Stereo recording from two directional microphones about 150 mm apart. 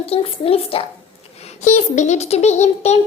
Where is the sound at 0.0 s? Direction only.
40° left (ahead or behind).